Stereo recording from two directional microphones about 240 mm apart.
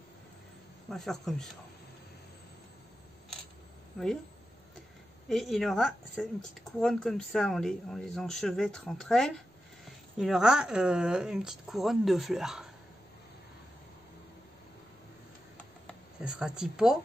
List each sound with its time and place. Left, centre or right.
0.8 s speech: centre
3.9 s speech: centre
5.3 s speech: centre
15.5 s a sound: centre